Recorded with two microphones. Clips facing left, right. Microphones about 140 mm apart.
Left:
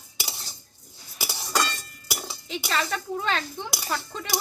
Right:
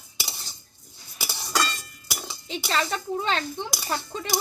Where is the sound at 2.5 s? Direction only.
30° right (ahead or behind).